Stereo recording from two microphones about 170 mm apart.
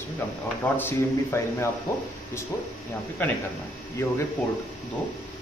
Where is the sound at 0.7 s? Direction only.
15° left (ahead or behind).